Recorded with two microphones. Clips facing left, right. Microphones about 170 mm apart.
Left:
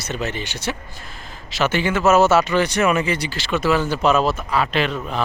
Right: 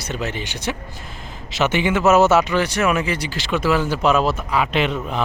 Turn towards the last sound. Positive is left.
turn(degrees=-20)  # may be behind; listen again after turning